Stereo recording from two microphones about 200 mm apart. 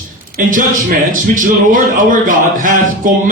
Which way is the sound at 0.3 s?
40° right (ahead or behind).